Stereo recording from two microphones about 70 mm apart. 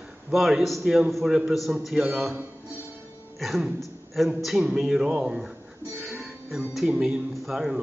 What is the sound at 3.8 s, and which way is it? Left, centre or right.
A man's voice, centre.